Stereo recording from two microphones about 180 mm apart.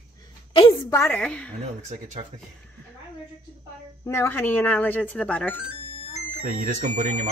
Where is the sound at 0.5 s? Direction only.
30° left (ahead or behind).